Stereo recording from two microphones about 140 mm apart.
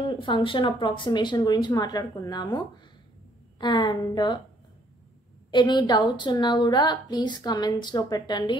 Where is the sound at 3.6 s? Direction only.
35° left (ahead or behind).